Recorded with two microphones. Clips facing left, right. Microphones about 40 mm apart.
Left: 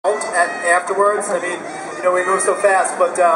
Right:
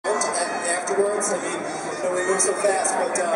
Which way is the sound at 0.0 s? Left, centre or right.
Left.